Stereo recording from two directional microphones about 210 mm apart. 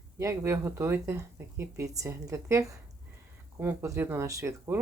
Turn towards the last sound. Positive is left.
turn(degrees=-10)  # may be behind; listen again after turning